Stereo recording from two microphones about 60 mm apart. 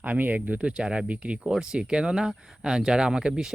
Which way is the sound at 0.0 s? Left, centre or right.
Right.